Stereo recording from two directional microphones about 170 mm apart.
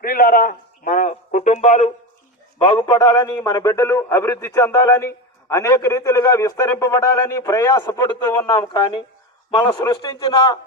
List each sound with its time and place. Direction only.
0.0 s a sound: 60° left (ahead or behind); by 1.9 s 45° left (ahead or behind)
2.6 s a man's voice: 30° left (ahead or behind)
9.5 s a man's voice: 30° left (ahead or behind)